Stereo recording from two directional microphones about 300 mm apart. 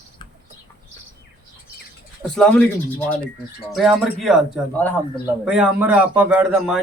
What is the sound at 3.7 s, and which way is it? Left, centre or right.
Speech, centre.